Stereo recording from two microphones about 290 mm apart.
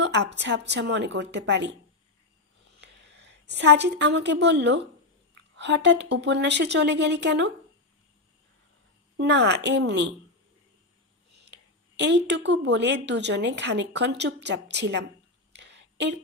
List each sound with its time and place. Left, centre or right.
0.0 s speech: right
2.8 s a woman's voice: right
9.1 s speech: right
11.4 s speech: right
15.5 s a sound: right